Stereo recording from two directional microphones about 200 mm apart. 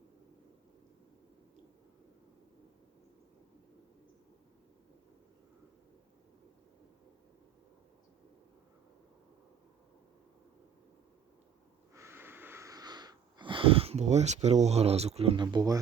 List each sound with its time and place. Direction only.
11.9 s wheeze: 10° right (ahead or behind)